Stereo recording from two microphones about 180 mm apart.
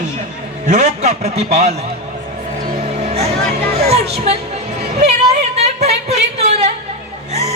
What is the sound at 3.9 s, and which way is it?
Speech, 35° right (ahead or behind).